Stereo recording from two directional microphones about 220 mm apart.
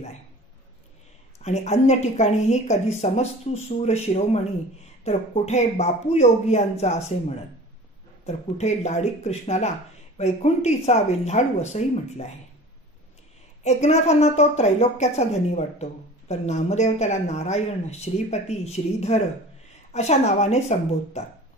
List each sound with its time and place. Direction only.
1.4 s a woman's voice: 30° left (ahead or behind)
13.7 s a woman's voice: 30° left (ahead or behind)